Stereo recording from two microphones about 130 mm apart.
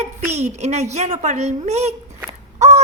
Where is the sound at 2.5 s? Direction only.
55° right (ahead or behind).